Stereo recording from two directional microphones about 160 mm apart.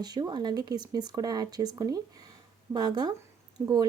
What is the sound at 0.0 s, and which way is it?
Speech, 25° right (ahead or behind).